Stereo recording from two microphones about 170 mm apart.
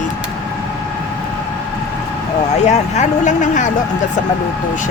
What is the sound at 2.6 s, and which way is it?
Speech, 40° left (ahead or behind).